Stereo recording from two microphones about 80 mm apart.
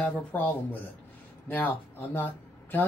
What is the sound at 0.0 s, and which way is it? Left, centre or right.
Speech, centre.